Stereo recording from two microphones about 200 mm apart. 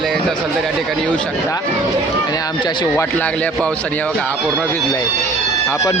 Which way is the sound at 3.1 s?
5° left (ahead or behind).